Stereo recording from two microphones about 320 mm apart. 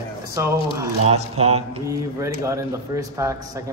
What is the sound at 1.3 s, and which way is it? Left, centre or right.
Mantra, centre.